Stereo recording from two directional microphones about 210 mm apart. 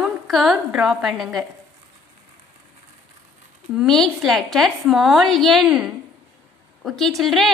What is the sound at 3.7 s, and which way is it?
A woman's voice, centre (ahead or behind).